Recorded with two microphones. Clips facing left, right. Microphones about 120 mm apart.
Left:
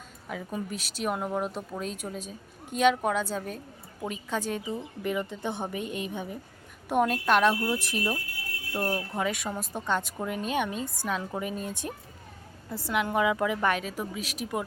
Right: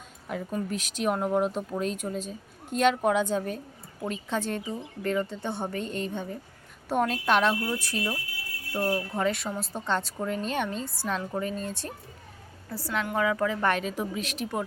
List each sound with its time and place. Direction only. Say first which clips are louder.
0.3 s speech: right 3 dB; centre (ahead or behind)
7.7 s speech: left 1 dB; 15° left (ahead or behind)